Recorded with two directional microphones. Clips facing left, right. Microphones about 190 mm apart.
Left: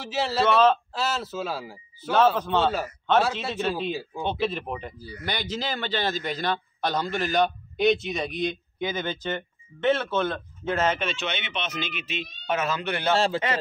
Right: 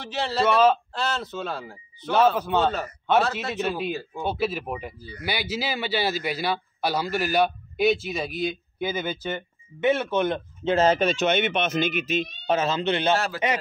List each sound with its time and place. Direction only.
0.0 s speech: 5° left (ahead or behind)
0.5 s a man's voice: 10° right (ahead or behind)
0.9 s speech: 5° left (ahead or behind)
2.3 s a man's voice: 10° right (ahead or behind)
2.6 s speech: 5° left (ahead or behind)
3.6 s a man's voice: 10° right (ahead or behind)
3.9 s speech: 10° left (ahead or behind)
4.2 s a man's voice: 5° right (ahead or behind); by 12.3 s 45° right (ahead or behind)
12.4 s speech: 30° right (ahead or behind)
13.1 s a man's voice: 30° left (ahead or behind)